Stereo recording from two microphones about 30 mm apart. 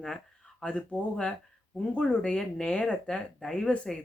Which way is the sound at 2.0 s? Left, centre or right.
Left.